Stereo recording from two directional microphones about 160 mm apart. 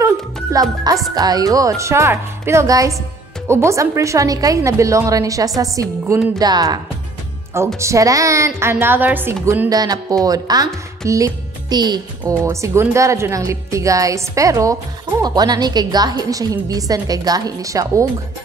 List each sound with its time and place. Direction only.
0.0 s a woman's voice: 20° right (ahead or behind)
12.4 s speech: 15° right (ahead or behind)